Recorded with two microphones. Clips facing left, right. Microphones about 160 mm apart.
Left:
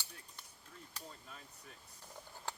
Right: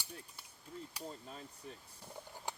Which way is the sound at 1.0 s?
35° right (ahead or behind).